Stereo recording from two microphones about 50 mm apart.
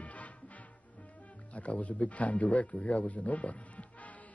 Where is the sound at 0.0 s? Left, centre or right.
Left.